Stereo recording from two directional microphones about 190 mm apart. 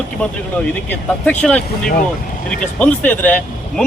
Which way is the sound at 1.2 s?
5° left (ahead or behind).